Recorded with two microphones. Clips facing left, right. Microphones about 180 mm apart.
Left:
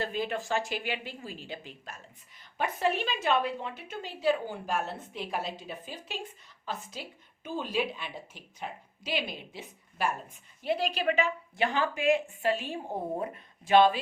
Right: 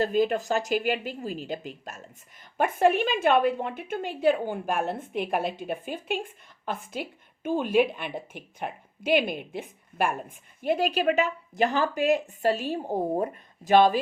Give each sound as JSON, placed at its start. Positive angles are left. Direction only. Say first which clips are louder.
{"t": 0.0, "sound": "a woman's voice", "louder": "right 8 dB", "side_deg": -40}